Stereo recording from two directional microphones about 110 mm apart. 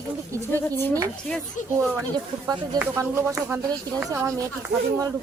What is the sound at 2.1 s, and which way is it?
Speech, 40° right (ahead or behind).